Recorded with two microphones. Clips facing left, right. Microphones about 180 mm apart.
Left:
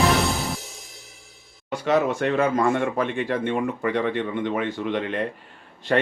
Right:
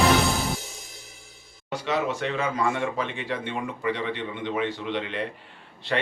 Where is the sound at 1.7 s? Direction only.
50° left (ahead or behind).